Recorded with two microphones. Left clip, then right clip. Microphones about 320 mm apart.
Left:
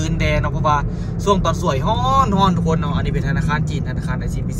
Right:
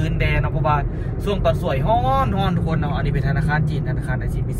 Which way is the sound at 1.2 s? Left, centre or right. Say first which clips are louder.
Left 3 dB; centre.